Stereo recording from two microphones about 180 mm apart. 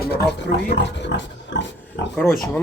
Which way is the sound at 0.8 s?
80° left.